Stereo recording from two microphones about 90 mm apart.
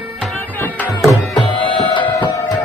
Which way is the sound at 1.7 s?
65° left (ahead or behind).